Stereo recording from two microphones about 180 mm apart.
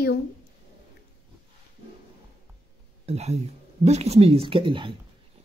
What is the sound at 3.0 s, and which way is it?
Speech, 35° right (ahead or behind).